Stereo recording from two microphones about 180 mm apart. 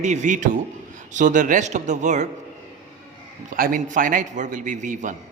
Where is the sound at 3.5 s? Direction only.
50° right (ahead or behind).